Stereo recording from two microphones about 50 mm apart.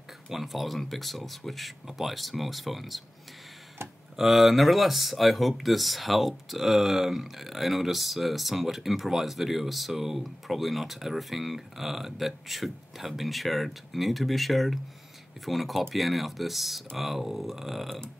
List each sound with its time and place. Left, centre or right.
0.3 s speech: centre
4.2 s speech: centre